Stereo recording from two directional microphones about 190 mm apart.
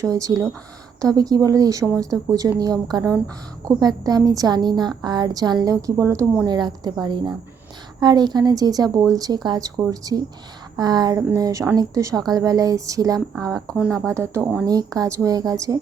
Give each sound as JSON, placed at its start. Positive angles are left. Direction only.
{"t": 0.0, "sound": "a woman's voice", "side_deg": -20}